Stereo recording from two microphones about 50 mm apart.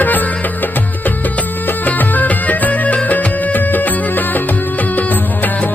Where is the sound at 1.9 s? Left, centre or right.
Left.